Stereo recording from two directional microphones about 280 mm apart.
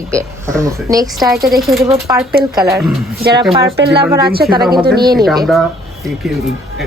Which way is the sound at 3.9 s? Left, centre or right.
Centre.